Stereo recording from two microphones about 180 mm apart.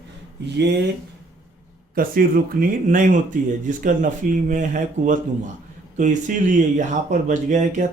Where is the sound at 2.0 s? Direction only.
55° right (ahead or behind).